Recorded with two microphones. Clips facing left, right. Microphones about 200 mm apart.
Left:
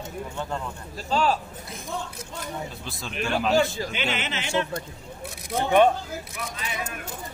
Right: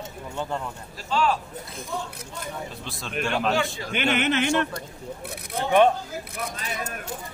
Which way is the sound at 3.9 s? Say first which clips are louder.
Right 6 dB; 55° right (ahead or behind).